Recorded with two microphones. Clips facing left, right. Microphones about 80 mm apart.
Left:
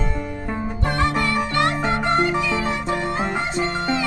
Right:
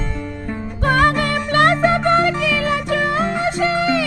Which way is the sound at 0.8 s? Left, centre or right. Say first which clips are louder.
Right 6 dB; right.